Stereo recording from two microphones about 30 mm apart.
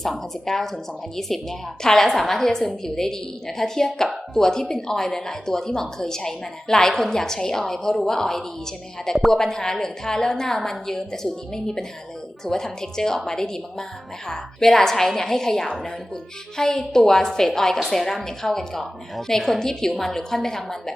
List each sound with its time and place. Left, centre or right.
0.2 s a woman's voice: centre